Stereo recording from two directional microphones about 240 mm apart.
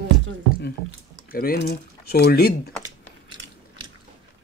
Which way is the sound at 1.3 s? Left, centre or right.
Left.